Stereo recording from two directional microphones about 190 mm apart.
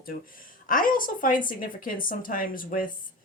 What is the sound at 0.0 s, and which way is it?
Speech, 50° left (ahead or behind).